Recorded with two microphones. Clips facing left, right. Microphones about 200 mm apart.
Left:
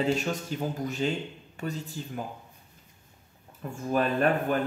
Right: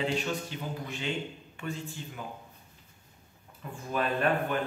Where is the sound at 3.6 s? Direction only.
45° left (ahead or behind).